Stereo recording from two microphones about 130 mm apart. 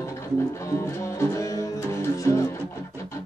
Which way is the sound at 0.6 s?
20° left (ahead or behind).